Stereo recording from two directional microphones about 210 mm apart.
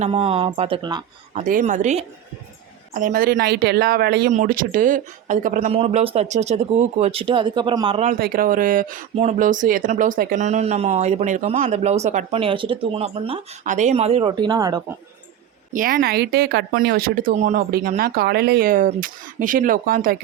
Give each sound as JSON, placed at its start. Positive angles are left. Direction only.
{"t": 0.0, "sound": "speech", "side_deg": -25}
{"t": 1.3, "sound": "speech", "side_deg": -35}
{"t": 8.2, "sound": "speech", "side_deg": -45}
{"t": 15.7, "sound": "speech", "side_deg": -45}